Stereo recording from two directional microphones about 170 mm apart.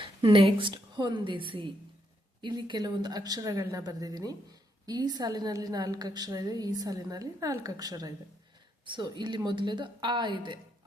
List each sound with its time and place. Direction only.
0.0 s a woman's voice: 30° right (ahead or behind)